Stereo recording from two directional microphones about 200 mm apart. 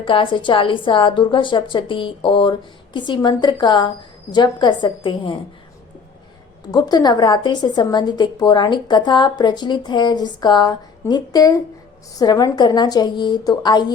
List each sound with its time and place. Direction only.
0.0 s a woman's voice: 25° left (ahead or behind)
6.7 s a woman's voice: 20° left (ahead or behind)